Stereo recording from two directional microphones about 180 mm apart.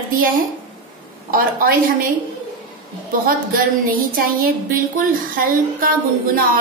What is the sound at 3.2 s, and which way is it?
Speech, 50° right (ahead or behind).